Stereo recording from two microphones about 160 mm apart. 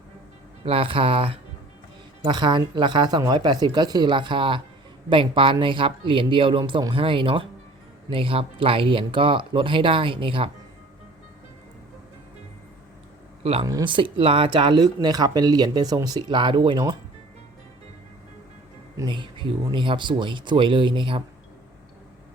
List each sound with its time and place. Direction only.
0.6 s speech: 35° right (ahead or behind)
13.4 s speech: 35° right (ahead or behind)
18.9 s speech: 30° right (ahead or behind)